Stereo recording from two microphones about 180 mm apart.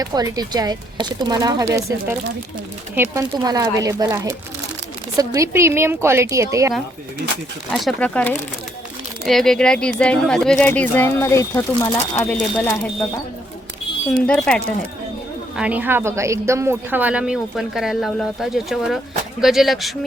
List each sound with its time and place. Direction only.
0.0 s a woman's voice: 20° right (ahead or behind)
7.7 s speech: 5° left (ahead or behind)
14.3 s speech: 5° left (ahead or behind)
15.5 s speech: 5° right (ahead or behind)